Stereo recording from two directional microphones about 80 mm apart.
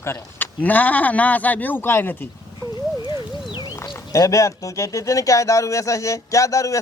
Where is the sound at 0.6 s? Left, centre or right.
Centre.